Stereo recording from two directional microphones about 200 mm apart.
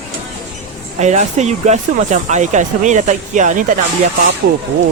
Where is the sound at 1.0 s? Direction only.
35° right (ahead or behind).